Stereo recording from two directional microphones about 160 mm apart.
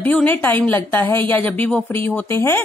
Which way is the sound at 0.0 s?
10° left (ahead or behind).